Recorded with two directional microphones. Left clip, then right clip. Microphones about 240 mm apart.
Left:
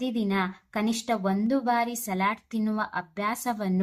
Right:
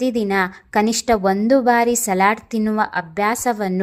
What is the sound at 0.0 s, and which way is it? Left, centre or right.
A woman's voice, right.